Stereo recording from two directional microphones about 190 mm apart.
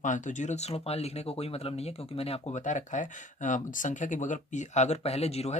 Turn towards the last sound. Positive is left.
turn(degrees=35)  # may be behind; listen again after turning